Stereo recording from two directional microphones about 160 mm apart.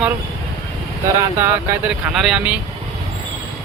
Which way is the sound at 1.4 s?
10° right (ahead or behind).